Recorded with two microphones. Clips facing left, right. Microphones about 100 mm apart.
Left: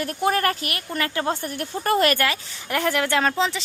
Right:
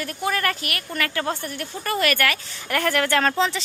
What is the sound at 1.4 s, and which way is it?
Speech, 40° left (ahead or behind).